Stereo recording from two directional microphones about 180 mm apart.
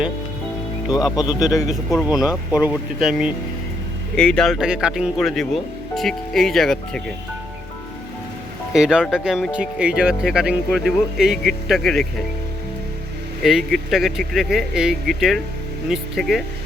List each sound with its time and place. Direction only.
1.1 s a man's voice: 20° left (ahead or behind)
1.6 s speech: centre (ahead or behind)
8.7 s speech: 5° right (ahead or behind)
13.4 s speech: centre (ahead or behind)